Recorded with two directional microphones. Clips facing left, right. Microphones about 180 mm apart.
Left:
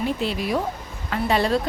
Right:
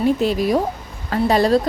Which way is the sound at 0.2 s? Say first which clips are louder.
Right 6 dB; 45° right (ahead or behind).